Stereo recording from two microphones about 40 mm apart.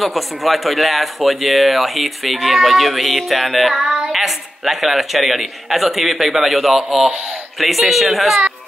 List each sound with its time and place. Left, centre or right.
0.0 s speech: centre
3.8 s child singing: centre
4.1 s speech: centre